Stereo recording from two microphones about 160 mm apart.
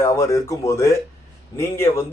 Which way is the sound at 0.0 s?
20° left (ahead or behind).